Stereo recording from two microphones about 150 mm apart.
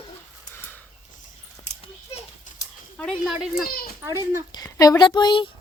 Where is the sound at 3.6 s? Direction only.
80° left.